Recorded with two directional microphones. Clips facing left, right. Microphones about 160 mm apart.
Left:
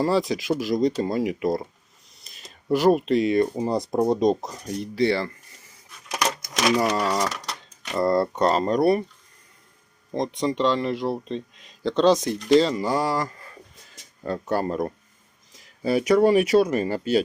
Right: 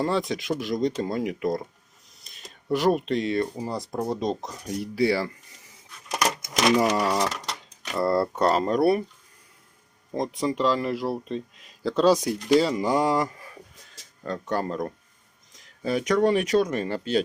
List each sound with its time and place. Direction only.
0.0 s speech: centre (ahead or behind)
2.1 s a sound: centre (ahead or behind)
3.5 s speech: 25° left (ahead or behind)
4.4 s speech: centre (ahead or behind)
4.6 s speech: 10° right (ahead or behind)
6.7 s speech: 15° right (ahead or behind)
10.2 s speech: 5° right (ahead or behind)
13.9 s speech: 10° left (ahead or behind)